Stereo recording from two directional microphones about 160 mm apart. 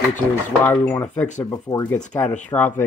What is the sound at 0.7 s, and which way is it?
Speech, 10° left (ahead or behind).